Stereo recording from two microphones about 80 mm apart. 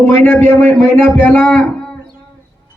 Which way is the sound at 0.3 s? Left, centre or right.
Centre.